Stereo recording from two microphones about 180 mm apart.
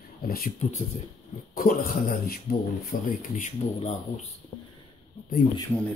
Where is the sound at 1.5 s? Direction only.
55° left (ahead or behind).